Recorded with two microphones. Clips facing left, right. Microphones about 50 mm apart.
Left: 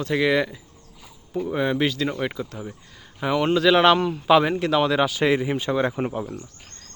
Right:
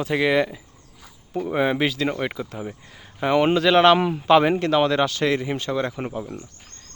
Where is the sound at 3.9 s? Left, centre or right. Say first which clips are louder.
Right 1 dB; centre.